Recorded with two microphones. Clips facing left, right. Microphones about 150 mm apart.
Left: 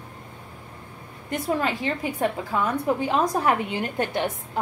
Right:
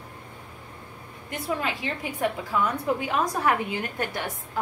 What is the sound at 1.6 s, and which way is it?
A woman's voice, 35° left (ahead or behind).